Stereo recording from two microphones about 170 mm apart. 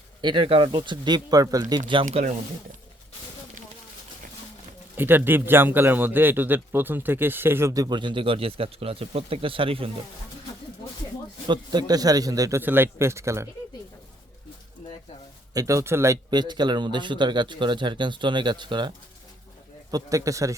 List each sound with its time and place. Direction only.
0.2 s speech: 30° right (ahead or behind)
2.0 s speech: 45° right (ahead or behind)
4.9 s a man's voice: 10° right (ahead or behind); by 9.9 s 35° right (ahead or behind)
11.4 s speech: 25° right (ahead or behind)
15.5 s speech: 20° right (ahead or behind)